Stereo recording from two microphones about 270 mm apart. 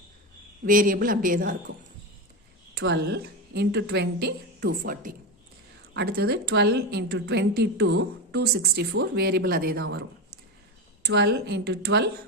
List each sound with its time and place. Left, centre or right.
0.6 s a woman's voice: right
2.7 s a woman's voice: right
11.0 s a woman's voice: right